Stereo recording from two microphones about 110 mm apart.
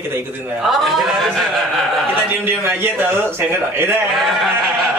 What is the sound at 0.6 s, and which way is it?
A man's voice, centre (ahead or behind).